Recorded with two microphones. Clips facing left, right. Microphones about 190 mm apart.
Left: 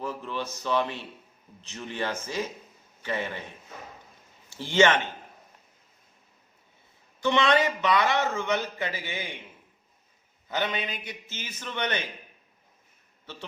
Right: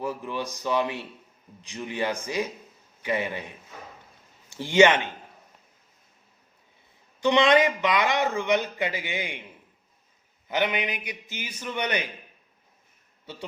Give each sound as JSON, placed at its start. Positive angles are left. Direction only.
{"t": 0.0, "sound": "a sound", "side_deg": -15}
{"t": 1.6, "sound": "a man's voice", "side_deg": -15}
{"t": 7.2, "sound": "a man's voice", "side_deg": -15}
{"t": 10.5, "sound": "a man's voice", "side_deg": -15}